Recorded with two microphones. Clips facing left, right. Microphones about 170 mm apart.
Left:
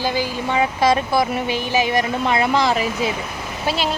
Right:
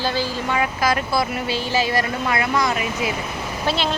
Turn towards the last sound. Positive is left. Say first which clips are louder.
# even
turn(degrees=10)  # may be behind; listen again after turning